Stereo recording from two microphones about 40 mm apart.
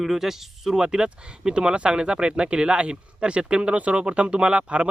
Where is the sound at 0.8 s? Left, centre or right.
Right.